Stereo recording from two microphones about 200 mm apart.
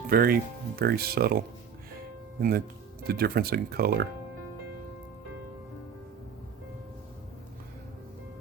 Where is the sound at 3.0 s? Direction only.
50° right (ahead or behind).